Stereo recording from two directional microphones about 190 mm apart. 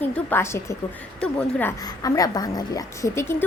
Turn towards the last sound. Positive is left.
turn(degrees=15)  # may be behind; listen again after turning